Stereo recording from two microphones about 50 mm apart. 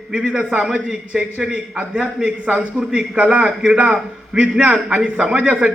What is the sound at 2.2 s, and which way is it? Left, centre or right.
Speech, right.